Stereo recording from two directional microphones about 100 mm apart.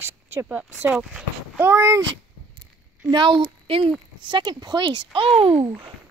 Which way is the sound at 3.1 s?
50° right (ahead or behind).